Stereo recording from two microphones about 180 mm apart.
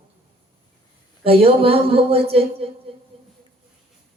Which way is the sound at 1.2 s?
30° right (ahead or behind).